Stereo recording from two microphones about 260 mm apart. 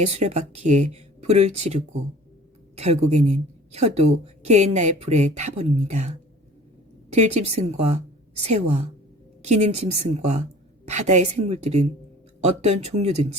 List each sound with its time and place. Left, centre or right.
0.1 s a woman's voice: right